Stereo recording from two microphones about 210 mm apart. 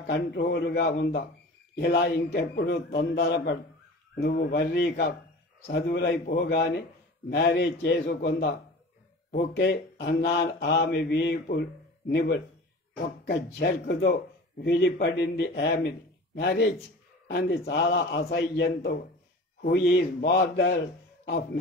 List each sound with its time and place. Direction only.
0.0 s speech: 55° left (ahead or behind)